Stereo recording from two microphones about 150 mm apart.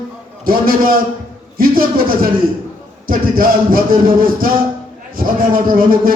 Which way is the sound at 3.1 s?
70° right (ahead or behind).